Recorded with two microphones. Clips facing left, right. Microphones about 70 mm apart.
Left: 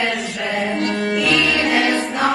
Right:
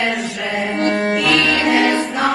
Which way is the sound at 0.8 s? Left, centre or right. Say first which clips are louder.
Right 3 dB; right.